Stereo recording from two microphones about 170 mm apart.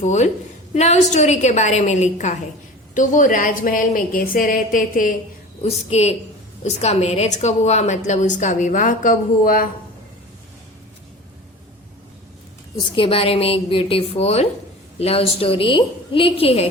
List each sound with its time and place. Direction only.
0.0 s a woman's voice: 45° left (ahead or behind)
5.6 s a woman's voice: 40° left (ahead or behind); by 9.6 s 55° left (ahead or behind)
12.7 s a woman's voice: 30° left (ahead or behind)